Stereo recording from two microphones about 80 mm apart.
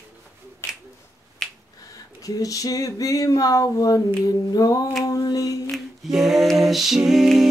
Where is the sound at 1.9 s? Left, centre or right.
Left.